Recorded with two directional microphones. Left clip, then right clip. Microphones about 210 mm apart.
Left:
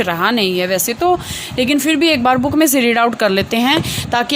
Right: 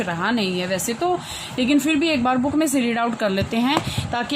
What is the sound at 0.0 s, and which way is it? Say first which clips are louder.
Speech: left 8 dB; 45° left (ahead or behind).